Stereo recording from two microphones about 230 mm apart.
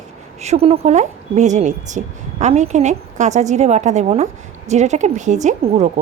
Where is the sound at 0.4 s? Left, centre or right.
Right.